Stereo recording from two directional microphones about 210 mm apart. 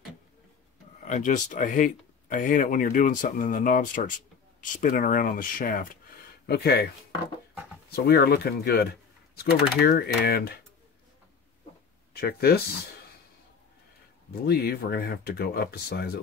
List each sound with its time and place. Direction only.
1.0 s speech: 35° left (ahead or behind)
7.9 s speech: 50° left (ahead or behind)
12.1 s speech: 50° left (ahead or behind)
14.4 s speech: 50° left (ahead or behind)